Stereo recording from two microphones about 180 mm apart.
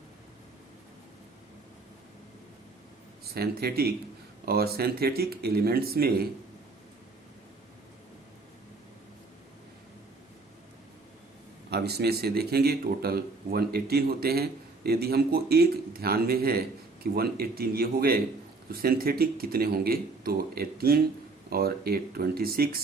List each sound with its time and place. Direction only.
3.2 s speech: 60° right (ahead or behind)
11.7 s speech: 65° right (ahead or behind)